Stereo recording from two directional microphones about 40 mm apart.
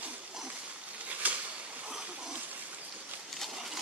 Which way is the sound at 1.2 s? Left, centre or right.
Right.